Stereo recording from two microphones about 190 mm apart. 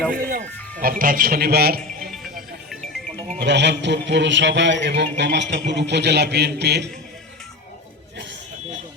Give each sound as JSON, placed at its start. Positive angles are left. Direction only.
{"t": 0.1, "sound": "speech", "side_deg": -45}
{"t": 2.0, "sound": "music", "side_deg": 0}
{"t": 3.3, "sound": "a man's voice", "side_deg": -65}